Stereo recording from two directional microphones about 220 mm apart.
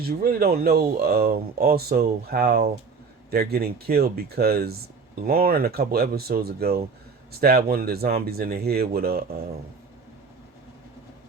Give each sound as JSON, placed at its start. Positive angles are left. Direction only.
{"t": 0.0, "sound": "speech", "side_deg": -45}